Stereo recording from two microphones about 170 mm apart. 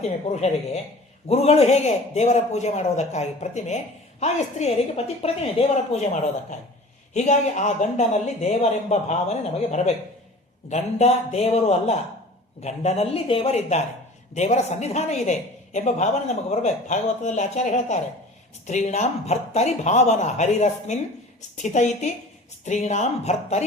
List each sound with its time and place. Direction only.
0.0 s speech: 40° left (ahead or behind)